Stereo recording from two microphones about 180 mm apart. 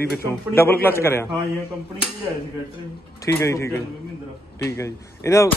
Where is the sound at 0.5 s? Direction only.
10° left (ahead or behind).